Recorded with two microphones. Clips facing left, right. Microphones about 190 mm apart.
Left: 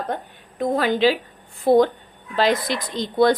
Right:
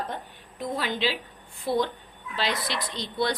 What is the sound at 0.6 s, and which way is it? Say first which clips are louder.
Speech: left 10 dB; 50° left (ahead or behind).